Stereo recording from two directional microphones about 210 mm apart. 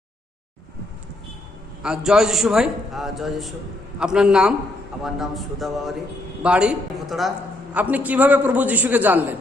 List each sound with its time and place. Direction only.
1.8 s a man's voice: 5° right (ahead or behind)